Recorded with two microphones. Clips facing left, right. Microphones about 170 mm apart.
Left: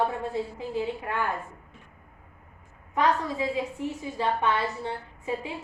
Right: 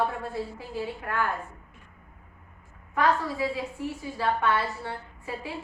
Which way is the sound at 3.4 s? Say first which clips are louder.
Left 1 dB; 20° left (ahead or behind).